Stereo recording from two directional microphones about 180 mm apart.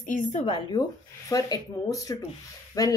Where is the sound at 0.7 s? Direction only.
20° left (ahead or behind).